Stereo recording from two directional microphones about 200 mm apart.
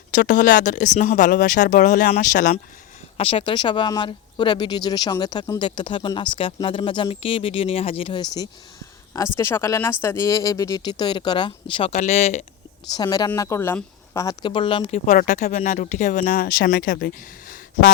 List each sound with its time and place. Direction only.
0.1 s speech: 40° left (ahead or behind)
3.2 s speech: 30° left (ahead or behind)
9.4 s speech: 15° left (ahead or behind); by 12.5 s 35° left (ahead or behind)
12.9 s speech: 20° left (ahead or behind); by 17.9 s 45° left (ahead or behind)